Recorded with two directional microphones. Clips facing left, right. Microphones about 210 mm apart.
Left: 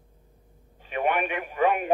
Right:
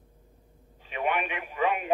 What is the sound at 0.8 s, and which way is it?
Radio, 50° left (ahead or behind).